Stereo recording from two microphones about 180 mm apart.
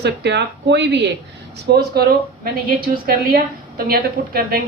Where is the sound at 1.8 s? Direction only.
60° right (ahead or behind).